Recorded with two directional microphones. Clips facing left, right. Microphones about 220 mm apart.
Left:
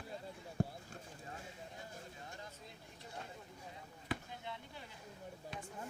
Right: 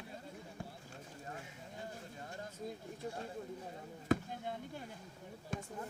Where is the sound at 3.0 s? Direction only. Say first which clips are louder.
Right 9 dB; 45° right (ahead or behind).